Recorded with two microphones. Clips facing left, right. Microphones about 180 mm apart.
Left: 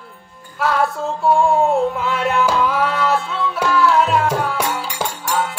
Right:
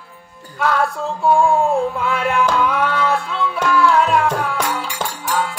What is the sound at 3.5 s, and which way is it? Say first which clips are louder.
Music: even; 5° left (ahead or behind).